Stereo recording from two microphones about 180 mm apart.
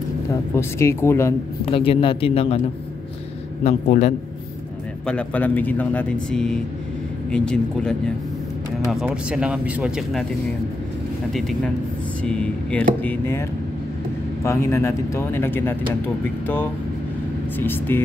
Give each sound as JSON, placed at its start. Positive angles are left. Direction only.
{"t": 0.3, "sound": "speech", "side_deg": 15}
{"t": 1.7, "sound": "speech", "side_deg": 30}
{"t": 3.6, "sound": "a man's voice", "side_deg": 45}
{"t": 5.0, "sound": "speech", "side_deg": 5}
{"t": 8.9, "sound": "speech", "side_deg": -5}
{"t": 11.3, "sound": "speech", "side_deg": 0}
{"t": 14.4, "sound": "speech", "side_deg": 15}
{"t": 17.6, "sound": "speech", "side_deg": 10}